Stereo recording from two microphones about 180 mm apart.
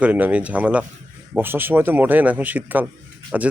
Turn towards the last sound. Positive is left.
turn(degrees=-5)  # may be behind; listen again after turning